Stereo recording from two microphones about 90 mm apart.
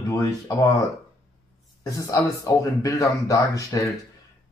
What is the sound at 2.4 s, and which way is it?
Speech, 40° left (ahead or behind).